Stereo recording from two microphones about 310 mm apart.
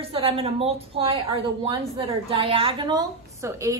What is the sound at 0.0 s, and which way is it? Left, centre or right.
A woman's voice, centre.